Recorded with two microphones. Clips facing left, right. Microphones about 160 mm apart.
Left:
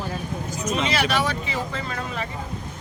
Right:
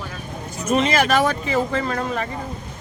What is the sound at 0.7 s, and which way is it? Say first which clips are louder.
Speech: right 6 dB; 50° right (ahead or behind).